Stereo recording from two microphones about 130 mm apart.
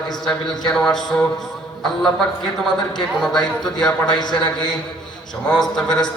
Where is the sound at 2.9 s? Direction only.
5° left (ahead or behind).